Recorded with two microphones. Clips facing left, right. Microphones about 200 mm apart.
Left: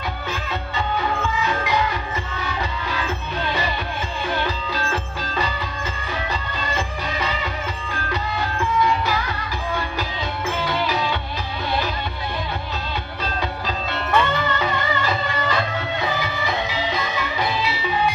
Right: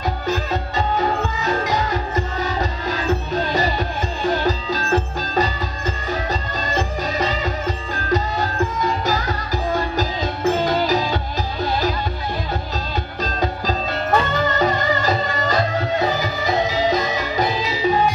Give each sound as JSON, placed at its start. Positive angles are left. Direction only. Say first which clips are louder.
{"t": 0.3, "sound": "music", "louder": "right 8 dB", "side_deg": -40}
{"t": 6.6, "sound": "music", "louder": "right 4 dB", "side_deg": -40}
{"t": 13.2, "sound": "music", "louder": "right 4 dB", "side_deg": -40}